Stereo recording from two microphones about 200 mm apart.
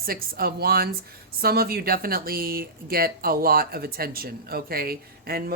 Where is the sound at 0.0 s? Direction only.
50° right (ahead or behind).